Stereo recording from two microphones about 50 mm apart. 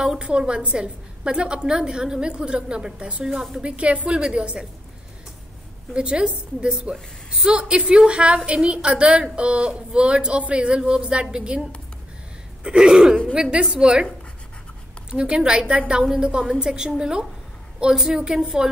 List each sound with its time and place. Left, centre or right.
0.0 s a woman's voice: centre
3.3 s a woman's voice: centre
3.6 s a woman's voice: right
5.9 s a woman's voice: centre
12.6 s a woman's voice: centre
15.0 s a woman's voice: centre